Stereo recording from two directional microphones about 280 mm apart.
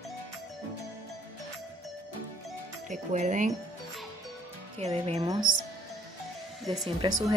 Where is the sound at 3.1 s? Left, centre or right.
Right.